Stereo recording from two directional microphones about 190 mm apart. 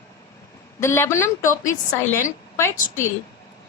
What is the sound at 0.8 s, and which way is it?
A woman's voice, 15° left (ahead or behind).